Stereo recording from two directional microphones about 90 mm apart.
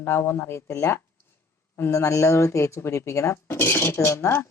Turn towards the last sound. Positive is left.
turn(degrees=30)  # may be behind; listen again after turning